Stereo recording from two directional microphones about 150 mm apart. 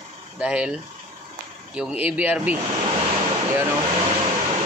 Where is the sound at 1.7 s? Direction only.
5° right (ahead or behind).